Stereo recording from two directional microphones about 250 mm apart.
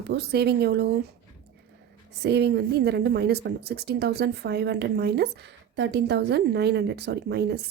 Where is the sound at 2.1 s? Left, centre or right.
Right.